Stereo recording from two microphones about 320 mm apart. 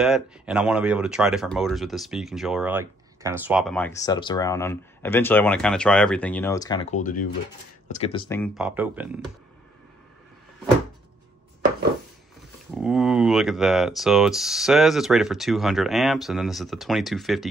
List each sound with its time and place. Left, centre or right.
0.0 s speech: centre
8.4 s speech: centre
12.7 s speech: centre